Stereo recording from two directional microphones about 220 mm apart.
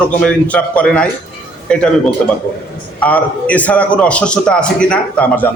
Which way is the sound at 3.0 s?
5° left (ahead or behind).